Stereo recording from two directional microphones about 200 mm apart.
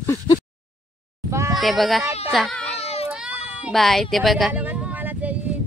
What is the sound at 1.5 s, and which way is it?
A child's voice, centre (ahead or behind).